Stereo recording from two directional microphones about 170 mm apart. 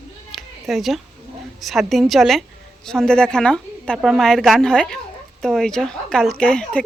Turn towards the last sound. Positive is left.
turn(degrees=5)  # may be behind; listen again after turning